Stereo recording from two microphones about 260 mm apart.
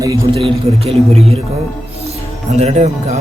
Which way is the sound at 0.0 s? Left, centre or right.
Centre.